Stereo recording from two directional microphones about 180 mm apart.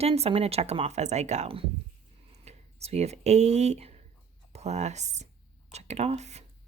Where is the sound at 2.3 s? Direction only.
35° right (ahead or behind).